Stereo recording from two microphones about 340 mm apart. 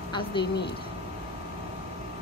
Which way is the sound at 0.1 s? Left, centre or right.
Centre.